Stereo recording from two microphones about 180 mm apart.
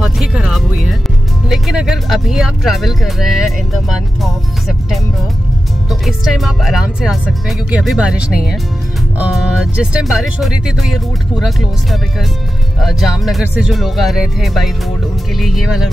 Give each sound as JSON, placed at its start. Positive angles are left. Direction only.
{"t": 0.0, "sound": "music", "side_deg": -5}
{"t": 1.5, "sound": "speech", "side_deg": -5}